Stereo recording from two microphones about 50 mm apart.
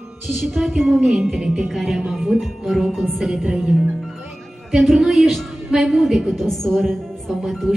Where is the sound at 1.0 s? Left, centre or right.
Centre.